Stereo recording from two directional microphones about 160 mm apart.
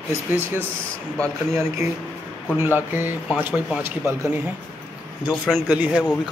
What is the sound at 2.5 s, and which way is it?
A man's voice, 15° right (ahead or behind).